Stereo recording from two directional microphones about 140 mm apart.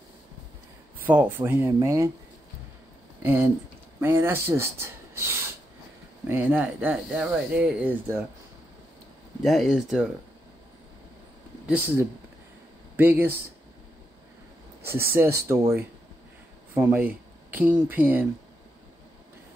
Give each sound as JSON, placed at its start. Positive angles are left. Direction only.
{"t": 1.0, "sound": "speech", "side_deg": -15}
{"t": 3.2, "sound": "speech", "side_deg": -15}
{"t": 9.4, "sound": "speech", "side_deg": 0}
{"t": 11.6, "sound": "speech", "side_deg": -10}
{"t": 15.1, "sound": "speech", "side_deg": -15}